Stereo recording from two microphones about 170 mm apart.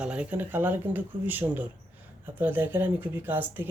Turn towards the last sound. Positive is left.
turn(degrees=-10)  # may be behind; listen again after turning